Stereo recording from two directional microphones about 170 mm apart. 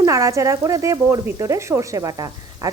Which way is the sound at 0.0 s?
20° right (ahead or behind).